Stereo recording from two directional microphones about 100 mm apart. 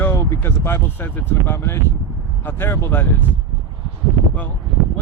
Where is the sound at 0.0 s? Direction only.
25° left (ahead or behind).